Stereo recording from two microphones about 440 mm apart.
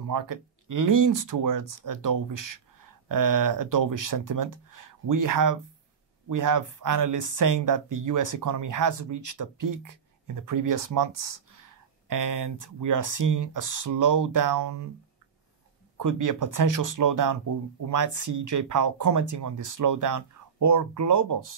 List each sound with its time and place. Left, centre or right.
0.0 s speech: right
16.0 s speech: right